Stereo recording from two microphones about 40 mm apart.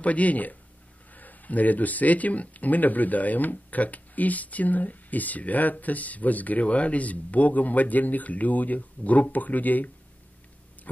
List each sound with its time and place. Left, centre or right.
0.0 s speech: left